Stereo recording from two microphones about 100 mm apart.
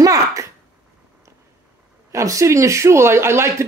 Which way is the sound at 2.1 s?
30° right (ahead or behind).